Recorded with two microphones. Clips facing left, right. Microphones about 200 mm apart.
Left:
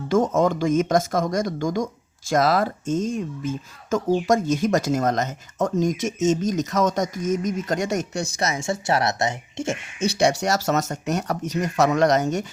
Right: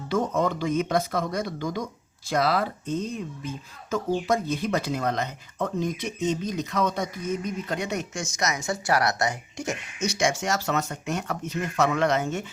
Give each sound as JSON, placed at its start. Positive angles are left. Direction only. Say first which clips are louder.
{"t": 0.3, "sound": "speech", "louder": "left 5 dB", "side_deg": 45}